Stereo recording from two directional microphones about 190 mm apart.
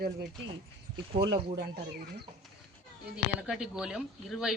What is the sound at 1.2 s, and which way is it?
Speech, 25° right (ahead or behind).